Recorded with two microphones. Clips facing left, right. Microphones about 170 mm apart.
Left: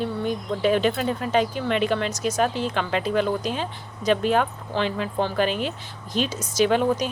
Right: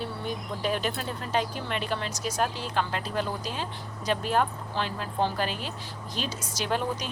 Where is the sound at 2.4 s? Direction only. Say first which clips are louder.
Left 4 dB; 60° left (ahead or behind).